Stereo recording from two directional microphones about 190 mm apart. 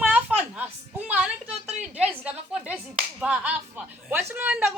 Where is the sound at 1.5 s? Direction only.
35° right (ahead or behind).